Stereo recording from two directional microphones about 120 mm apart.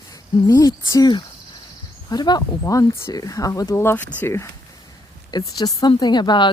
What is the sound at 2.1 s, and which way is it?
A woman's voice, 35° left (ahead or behind).